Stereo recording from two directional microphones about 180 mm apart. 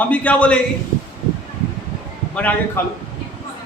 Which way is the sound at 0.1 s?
10° left (ahead or behind).